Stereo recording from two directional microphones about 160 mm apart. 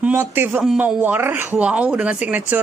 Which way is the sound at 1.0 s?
10° right (ahead or behind).